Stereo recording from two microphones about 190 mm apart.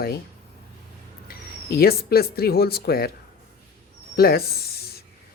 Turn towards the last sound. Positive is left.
turn(degrees=55)  # may be behind; listen again after turning